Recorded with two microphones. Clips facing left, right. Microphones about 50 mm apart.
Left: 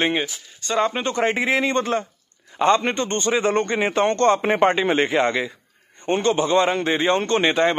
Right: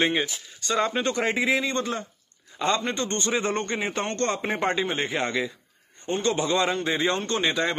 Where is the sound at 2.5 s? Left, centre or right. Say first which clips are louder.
Left 8 dB; left.